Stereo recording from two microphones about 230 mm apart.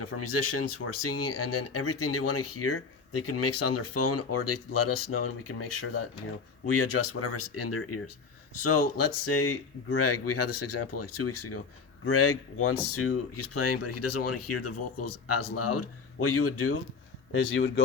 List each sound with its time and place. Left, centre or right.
0.0 s speech: left
6.7 s speech: left
12.0 s speech: left
17.3 s speech: left